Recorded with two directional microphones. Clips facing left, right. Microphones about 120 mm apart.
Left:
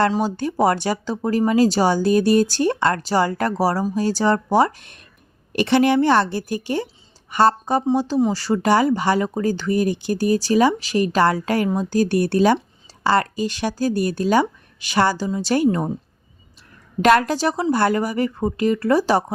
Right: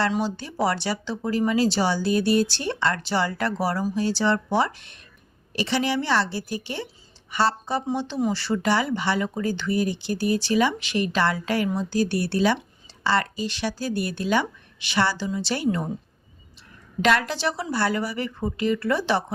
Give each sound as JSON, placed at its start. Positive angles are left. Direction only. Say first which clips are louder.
{"t": 0.2, "sound": "speech", "louder": "left 6 dB", "side_deg": 45}
{"t": 5.5, "sound": "speech", "louder": "left 8 dB", "side_deg": 55}
{"t": 17.0, "sound": "speech", "louder": "left 6 dB", "side_deg": 45}